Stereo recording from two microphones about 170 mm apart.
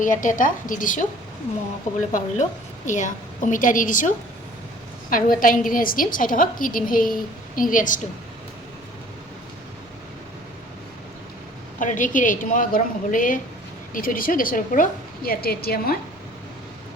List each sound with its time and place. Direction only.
0.0 s a woman's voice: 50° left (ahead or behind)
2.1 s a woman's voice: 45° left (ahead or behind)
5.1 s a woman's voice: 55° left (ahead or behind)
11.8 s a woman's voice: 50° left (ahead or behind)